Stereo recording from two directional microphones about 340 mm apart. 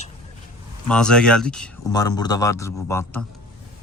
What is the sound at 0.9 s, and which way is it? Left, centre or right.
Speech, centre.